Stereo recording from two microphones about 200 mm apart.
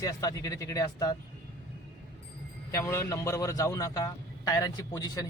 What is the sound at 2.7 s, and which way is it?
A man's voice, 15° left (ahead or behind).